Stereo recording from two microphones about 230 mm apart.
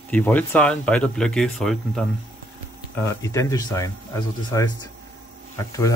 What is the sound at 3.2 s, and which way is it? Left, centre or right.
Speech, centre.